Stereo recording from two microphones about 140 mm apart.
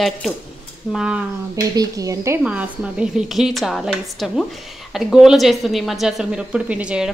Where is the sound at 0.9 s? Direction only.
5° right (ahead or behind).